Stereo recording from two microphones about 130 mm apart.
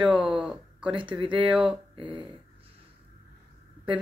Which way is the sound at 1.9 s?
40° right (ahead or behind).